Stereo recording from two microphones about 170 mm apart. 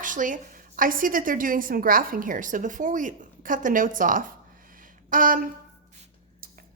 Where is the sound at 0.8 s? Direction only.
55° right (ahead or behind).